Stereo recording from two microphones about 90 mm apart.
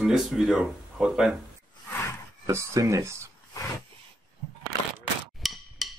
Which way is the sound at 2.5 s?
35° right (ahead or behind).